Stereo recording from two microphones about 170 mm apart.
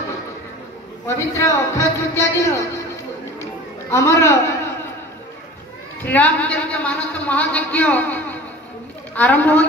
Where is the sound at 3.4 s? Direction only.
15° left (ahead or behind).